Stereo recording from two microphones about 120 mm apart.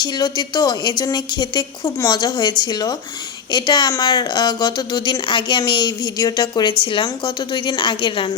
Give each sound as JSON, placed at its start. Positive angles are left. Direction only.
{"t": 0.0, "sound": "a woman's voice", "side_deg": 35}